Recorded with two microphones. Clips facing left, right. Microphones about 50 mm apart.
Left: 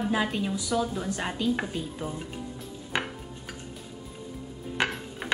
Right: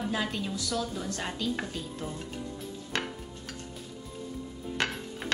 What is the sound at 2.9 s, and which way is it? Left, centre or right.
Dishes, centre.